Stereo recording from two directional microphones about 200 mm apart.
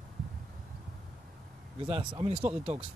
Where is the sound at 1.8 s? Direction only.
25° right (ahead or behind).